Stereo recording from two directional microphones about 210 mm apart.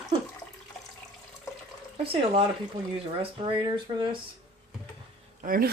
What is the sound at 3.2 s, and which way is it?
Speech, 25° right (ahead or behind).